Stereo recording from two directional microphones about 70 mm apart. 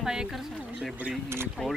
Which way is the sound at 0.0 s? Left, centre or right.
Centre.